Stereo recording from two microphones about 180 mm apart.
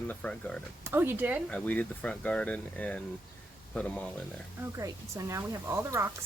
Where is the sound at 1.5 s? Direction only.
10° left (ahead or behind).